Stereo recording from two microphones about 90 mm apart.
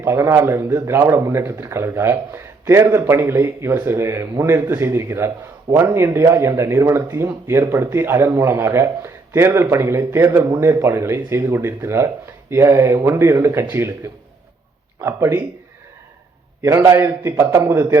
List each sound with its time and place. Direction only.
0.0 s a man's voice: 30° right (ahead or behind)
16.6 s a man's voice: 30° right (ahead or behind)